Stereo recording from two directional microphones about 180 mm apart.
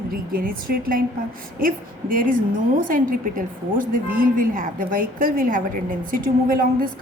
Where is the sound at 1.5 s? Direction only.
50° right (ahead or behind).